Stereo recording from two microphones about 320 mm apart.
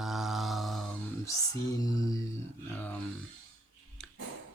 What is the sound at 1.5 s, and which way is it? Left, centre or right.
Music, centre.